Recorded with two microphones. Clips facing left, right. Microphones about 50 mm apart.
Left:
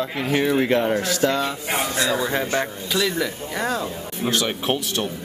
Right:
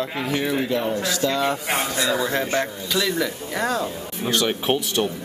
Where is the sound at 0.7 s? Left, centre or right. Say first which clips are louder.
Left 3 dB; left.